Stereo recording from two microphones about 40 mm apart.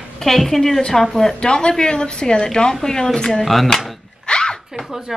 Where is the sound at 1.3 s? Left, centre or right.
Left.